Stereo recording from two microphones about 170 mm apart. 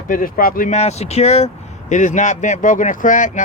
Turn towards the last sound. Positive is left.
turn(degrees=50)  # may be behind; listen again after turning